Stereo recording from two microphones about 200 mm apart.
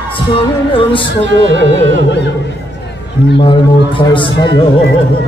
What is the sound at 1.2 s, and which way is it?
Music, 65° right (ahead or behind).